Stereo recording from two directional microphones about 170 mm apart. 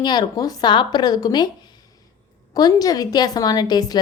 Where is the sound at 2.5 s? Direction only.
20° left (ahead or behind).